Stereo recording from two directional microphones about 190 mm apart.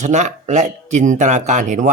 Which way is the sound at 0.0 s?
40° right (ahead or behind).